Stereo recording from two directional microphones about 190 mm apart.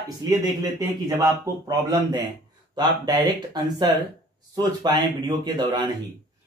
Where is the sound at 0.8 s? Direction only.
20° right (ahead or behind).